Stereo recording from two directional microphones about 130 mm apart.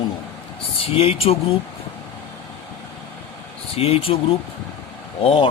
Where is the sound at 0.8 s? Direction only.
50° left (ahead or behind).